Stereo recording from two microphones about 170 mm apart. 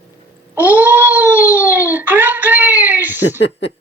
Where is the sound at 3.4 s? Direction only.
90° left.